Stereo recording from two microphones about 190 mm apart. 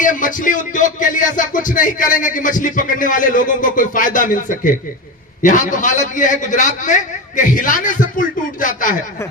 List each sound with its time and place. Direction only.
0.0 s music: 45° left (ahead or behind)